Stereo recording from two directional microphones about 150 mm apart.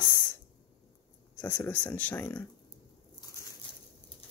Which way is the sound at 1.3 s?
10° left (ahead or behind).